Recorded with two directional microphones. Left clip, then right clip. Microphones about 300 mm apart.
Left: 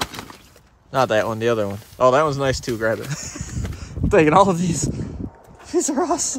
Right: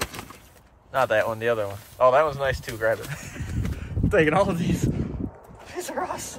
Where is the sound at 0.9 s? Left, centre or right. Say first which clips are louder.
Left 3 dB; left.